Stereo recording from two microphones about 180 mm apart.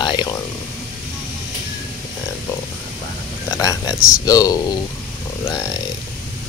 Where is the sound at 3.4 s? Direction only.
20° left (ahead or behind).